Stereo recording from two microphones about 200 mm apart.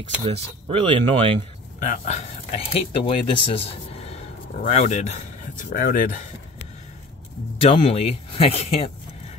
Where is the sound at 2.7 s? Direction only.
25° left (ahead or behind); by 6.2 s 45° left (ahead or behind).